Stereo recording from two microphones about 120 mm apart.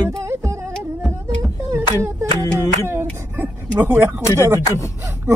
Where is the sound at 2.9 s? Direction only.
20° right (ahead or behind).